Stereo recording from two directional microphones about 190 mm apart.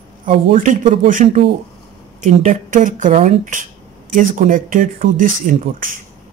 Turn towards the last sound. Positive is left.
turn(degrees=-45)  # may be behind; listen again after turning